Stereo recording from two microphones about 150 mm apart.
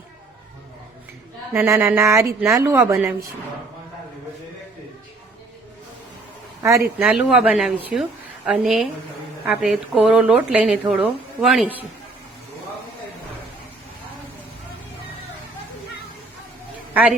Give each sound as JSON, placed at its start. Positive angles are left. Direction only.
{"t": 1.5, "sound": "speech", "side_deg": -15}
{"t": 6.6, "sound": "speech", "side_deg": -20}
{"t": 7.0, "sound": "speech", "side_deg": 0}
{"t": 16.9, "sound": "a man's voice", "side_deg": -10}